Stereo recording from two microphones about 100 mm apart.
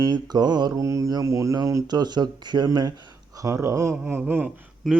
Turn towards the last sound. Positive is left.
turn(degrees=-5)  # may be behind; listen again after turning